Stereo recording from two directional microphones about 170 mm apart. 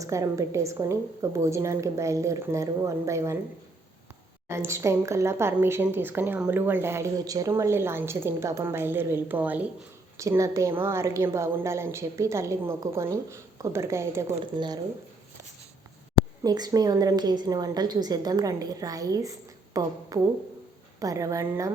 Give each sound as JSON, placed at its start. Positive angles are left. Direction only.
{"t": 0.0, "sound": "a woman's voice", "side_deg": -20}
{"t": 4.4, "sound": "a woman's voice", "side_deg": -15}
{"t": 16.4, "sound": "a woman's voice", "side_deg": -20}